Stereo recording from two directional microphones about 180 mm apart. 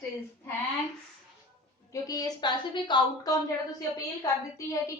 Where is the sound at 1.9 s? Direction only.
20° left (ahead or behind).